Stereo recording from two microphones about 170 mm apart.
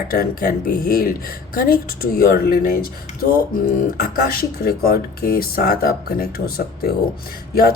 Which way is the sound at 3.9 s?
60° left (ahead or behind).